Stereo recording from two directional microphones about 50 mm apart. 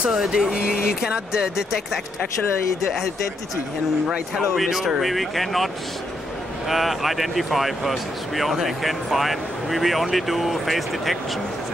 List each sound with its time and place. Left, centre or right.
0.3 s speech: centre
4.6 s speech: centre
6.7 s speech: centre